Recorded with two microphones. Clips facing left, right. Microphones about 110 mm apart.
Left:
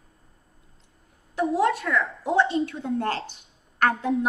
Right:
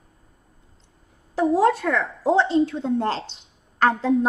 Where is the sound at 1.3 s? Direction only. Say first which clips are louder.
Right 4 dB; 30° right (ahead or behind).